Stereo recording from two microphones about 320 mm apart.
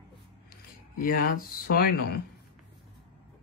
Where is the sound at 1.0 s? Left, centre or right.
Left.